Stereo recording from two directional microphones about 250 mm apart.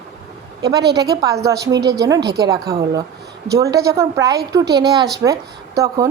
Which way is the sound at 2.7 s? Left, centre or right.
Centre.